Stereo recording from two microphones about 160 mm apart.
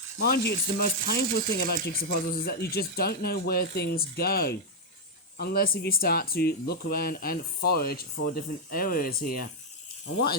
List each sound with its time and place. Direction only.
0.2 s speech: 80° left; by 9.5 s 60° left (ahead or behind)